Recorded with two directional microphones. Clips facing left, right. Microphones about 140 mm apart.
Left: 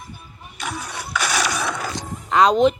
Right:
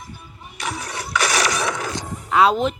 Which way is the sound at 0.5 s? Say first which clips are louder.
Right 1 dB; 90° right.